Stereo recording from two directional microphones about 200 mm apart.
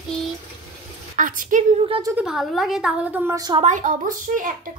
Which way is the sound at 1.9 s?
20° right (ahead or behind).